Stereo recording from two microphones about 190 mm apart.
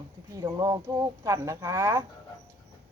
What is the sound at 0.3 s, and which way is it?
Speech, 20° right (ahead or behind).